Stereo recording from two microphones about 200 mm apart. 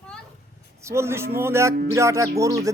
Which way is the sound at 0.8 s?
15° right (ahead or behind).